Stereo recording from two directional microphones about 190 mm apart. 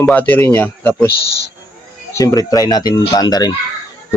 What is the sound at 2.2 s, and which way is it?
Speech, 15° left (ahead or behind).